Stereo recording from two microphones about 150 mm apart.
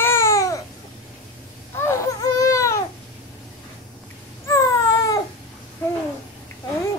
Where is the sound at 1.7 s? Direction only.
20° left (ahead or behind).